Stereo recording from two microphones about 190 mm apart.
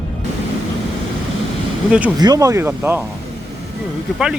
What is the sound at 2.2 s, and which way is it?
Speech, 20° right (ahead or behind).